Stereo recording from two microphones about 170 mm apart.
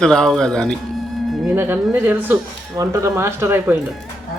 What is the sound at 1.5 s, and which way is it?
Speech, 10° right (ahead or behind).